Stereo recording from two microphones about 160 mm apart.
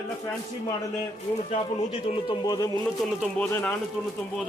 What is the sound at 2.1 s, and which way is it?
Speech, 25° left (ahead or behind).